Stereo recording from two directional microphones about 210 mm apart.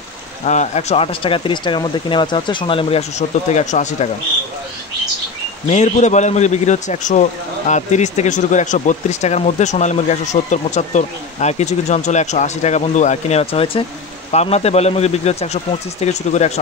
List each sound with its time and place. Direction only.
0.5 s speech: 35° left (ahead or behind)
5.7 s a man's voice: 35° left (ahead or behind)